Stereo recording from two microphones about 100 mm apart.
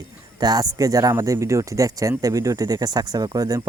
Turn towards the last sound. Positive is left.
turn(degrees=-40)  # may be behind; listen again after turning